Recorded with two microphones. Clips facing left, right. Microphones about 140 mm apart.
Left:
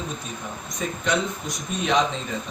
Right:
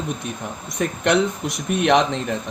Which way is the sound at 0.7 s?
65° right (ahead or behind).